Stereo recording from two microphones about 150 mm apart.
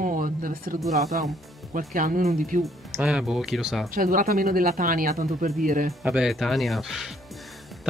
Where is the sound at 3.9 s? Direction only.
65° right (ahead or behind).